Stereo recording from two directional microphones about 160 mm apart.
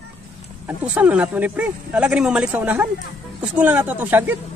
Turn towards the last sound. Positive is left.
turn(degrees=-10)  # may be behind; listen again after turning